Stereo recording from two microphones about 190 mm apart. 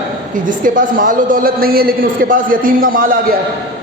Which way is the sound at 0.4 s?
45° right (ahead or behind).